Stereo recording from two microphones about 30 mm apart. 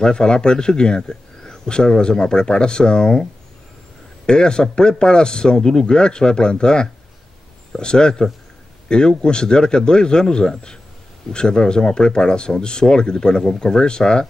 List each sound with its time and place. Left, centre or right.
0.0 s a man's voice: left
4.3 s a man's voice: left